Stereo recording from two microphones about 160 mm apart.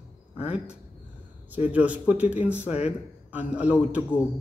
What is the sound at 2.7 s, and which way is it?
Speech, 40° left (ahead or behind).